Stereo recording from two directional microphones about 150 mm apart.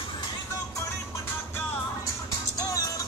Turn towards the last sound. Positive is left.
turn(degrees=25)  # may be behind; listen again after turning